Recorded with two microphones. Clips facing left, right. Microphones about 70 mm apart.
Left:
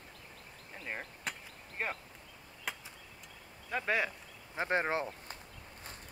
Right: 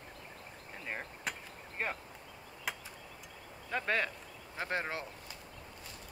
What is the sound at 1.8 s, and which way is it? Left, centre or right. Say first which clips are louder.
Speech: even; centre.